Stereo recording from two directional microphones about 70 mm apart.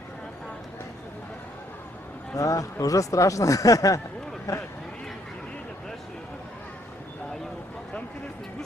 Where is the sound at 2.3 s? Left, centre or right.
Left.